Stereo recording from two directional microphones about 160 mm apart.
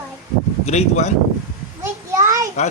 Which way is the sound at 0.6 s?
45° left (ahead or behind).